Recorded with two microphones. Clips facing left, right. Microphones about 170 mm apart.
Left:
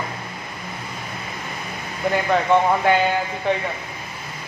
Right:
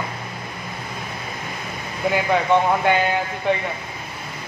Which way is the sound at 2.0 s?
Centre (ahead or behind).